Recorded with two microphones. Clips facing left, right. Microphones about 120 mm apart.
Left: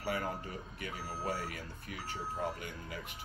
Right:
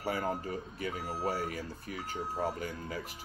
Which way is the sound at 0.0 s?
35° right (ahead or behind).